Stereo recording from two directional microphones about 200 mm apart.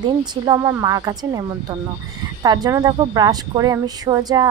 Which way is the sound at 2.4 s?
20° right (ahead or behind).